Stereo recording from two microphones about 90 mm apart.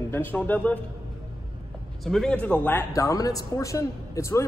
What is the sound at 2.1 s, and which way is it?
Speech, 10° left (ahead or behind).